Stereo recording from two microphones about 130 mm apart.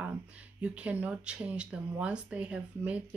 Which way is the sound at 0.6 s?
10° right (ahead or behind).